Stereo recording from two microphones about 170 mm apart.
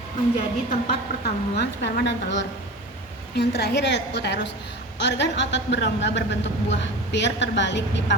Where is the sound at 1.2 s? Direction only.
80° left.